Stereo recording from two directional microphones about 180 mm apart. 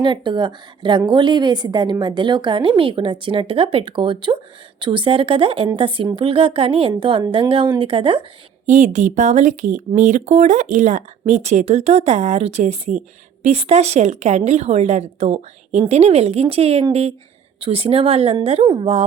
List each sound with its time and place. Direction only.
0.0 s a woman's voice: 25° right (ahead or behind)
8.6 s speech: 45° right (ahead or behind)